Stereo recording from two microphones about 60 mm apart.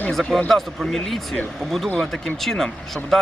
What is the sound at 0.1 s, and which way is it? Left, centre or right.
Speech, centre.